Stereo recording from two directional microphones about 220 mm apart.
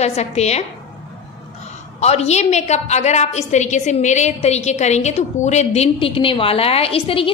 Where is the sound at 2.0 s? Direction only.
30° left (ahead or behind).